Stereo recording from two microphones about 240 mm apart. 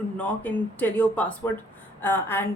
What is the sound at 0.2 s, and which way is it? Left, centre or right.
A woman's voice, centre.